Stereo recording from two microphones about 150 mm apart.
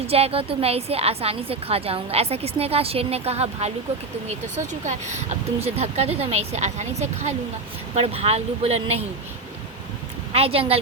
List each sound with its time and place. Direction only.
0.1 s a woman's voice: 40° right (ahead or behind)
10.3 s a woman's voice: 40° right (ahead or behind)